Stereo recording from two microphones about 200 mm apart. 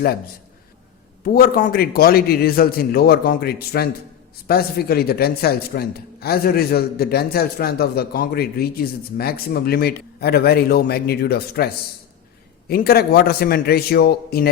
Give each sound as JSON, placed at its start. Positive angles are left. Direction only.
{"t": 1.2, "sound": "a man's voice", "side_deg": 45}